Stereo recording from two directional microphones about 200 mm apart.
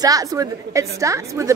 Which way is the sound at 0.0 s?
20° right (ahead or behind).